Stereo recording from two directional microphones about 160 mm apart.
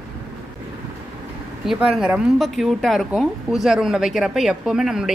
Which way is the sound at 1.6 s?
5° right (ahead or behind).